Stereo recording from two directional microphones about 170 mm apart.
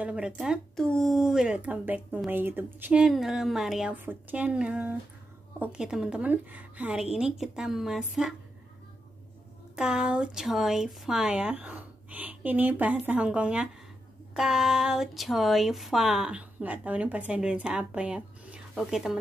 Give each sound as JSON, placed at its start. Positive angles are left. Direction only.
{"t": 0.0, "sound": "speech", "side_deg": -5}
{"t": 9.8, "sound": "speech", "side_deg": -5}